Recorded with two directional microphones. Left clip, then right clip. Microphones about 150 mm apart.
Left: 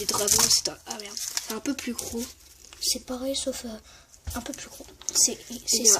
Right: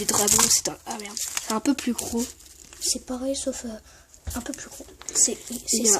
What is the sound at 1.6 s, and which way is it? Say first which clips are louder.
Speech: right 8 dB; 60° right (ahead or behind).